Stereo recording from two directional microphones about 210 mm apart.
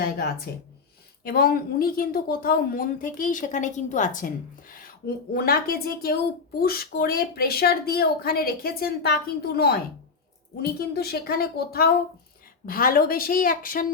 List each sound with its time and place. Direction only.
0.5 s speech: 45° left (ahead or behind)